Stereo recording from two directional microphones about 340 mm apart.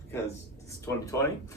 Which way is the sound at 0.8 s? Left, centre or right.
Centre.